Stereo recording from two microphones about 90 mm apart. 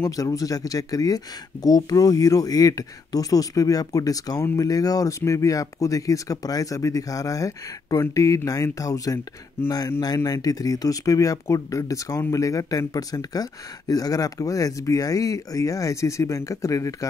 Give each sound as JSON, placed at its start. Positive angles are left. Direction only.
{"t": 0.0, "sound": "speech", "side_deg": 40}